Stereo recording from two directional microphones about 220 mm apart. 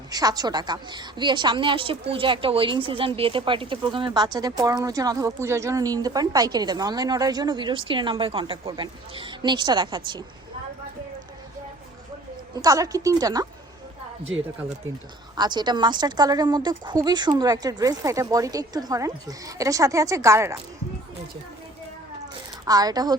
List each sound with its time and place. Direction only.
0.1 s speech: 15° right (ahead or behind)
12.5 s speech: 15° right (ahead or behind)
15.4 s speech: 20° right (ahead or behind)
22.6 s speech: 15° right (ahead or behind)